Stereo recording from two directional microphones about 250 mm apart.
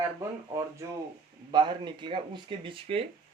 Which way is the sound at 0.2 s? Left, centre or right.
Centre.